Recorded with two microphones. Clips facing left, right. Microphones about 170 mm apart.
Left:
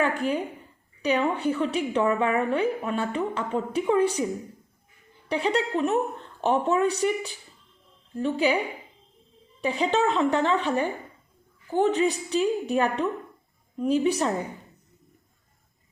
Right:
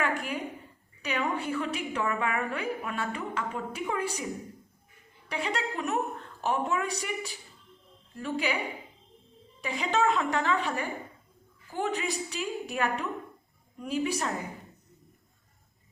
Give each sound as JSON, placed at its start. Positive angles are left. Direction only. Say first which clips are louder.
{"t": 0.0, "sound": "a sound", "louder": "left 6 dB", "side_deg": 30}
{"t": 1.0, "sound": "a woman's voice", "louder": "left 7 dB", "side_deg": 30}
{"t": 5.3, "sound": "a woman's voice", "louder": "left 8 dB", "side_deg": 30}